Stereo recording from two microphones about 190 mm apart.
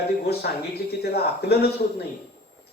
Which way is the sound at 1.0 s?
55° left (ahead or behind).